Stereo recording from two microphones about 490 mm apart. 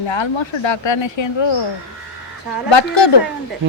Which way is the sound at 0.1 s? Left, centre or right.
Left.